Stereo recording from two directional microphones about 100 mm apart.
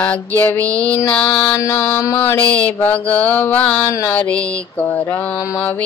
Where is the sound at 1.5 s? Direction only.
30° left (ahead or behind).